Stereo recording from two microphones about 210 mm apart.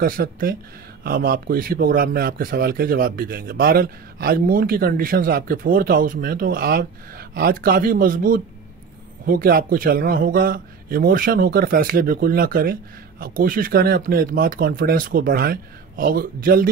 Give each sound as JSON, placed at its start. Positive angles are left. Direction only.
{"t": 0.0, "sound": "a man's voice", "side_deg": -45}